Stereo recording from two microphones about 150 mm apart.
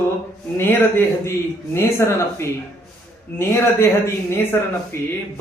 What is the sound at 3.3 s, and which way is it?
Speech, 15° left (ahead or behind).